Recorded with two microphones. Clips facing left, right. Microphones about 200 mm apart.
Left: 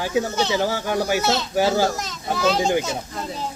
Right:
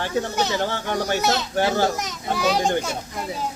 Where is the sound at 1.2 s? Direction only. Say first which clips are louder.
Left 1 dB; 15° right (ahead or behind).